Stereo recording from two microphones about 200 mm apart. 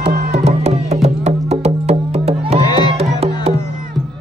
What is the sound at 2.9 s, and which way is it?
Music, 30° right (ahead or behind).